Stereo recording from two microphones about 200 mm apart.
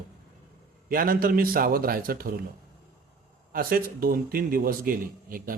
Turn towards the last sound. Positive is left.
turn(degrees=-45)  # may be behind; listen again after turning